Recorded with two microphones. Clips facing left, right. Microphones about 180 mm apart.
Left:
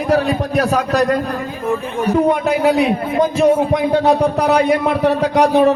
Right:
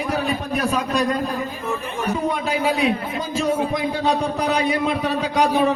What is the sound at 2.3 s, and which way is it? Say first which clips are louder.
A man's voice: left 7 dB; 65° left (ahead or behind).